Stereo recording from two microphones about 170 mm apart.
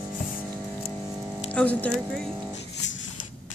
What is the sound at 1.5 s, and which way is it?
Speech, 10° left (ahead or behind).